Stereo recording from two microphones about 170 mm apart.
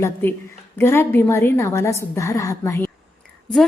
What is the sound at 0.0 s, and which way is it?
A woman's voice, 15° left (ahead or behind).